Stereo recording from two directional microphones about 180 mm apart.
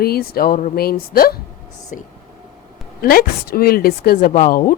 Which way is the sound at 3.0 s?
55° left (ahead or behind).